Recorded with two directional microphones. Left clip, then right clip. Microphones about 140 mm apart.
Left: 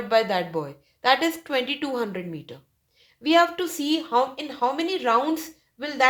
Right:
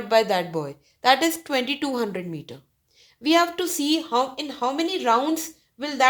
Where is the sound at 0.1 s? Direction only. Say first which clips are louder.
Right 2 dB; 35° right (ahead or behind).